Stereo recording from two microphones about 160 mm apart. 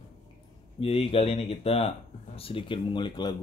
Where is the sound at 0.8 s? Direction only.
35° left (ahead or behind).